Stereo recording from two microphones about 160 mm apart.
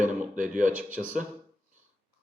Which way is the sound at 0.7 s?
10° right (ahead or behind).